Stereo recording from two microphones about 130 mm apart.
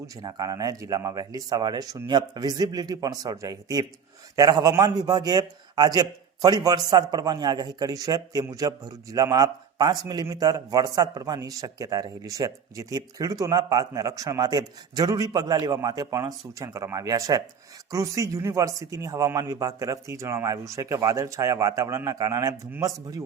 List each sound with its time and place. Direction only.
0.2 s a man's voice: 30° right (ahead or behind)
4.7 s a man's voice: 15° right (ahead or behind)
4.9 s a man's voice: 30° right (ahead or behind)